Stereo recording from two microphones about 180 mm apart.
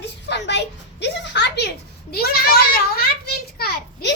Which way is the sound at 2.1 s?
60° left (ahead or behind).